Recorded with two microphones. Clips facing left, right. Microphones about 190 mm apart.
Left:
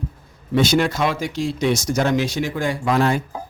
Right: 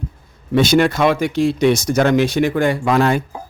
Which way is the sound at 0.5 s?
65° right (ahead or behind).